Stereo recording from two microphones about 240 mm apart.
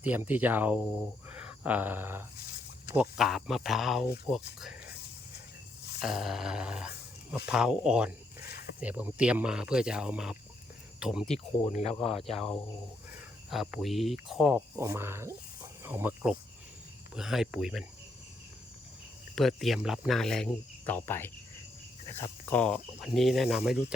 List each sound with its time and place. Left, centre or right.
0.0 s speech: centre
6.0 s speech: centre
11.7 s speech: left
12.2 s speech: centre
19.4 s speech: centre